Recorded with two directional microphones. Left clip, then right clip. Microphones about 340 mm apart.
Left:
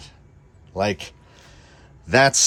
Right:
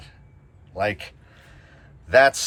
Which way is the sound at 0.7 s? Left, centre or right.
Centre.